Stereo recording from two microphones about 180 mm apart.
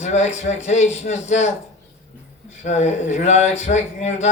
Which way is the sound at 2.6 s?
40° left (ahead or behind).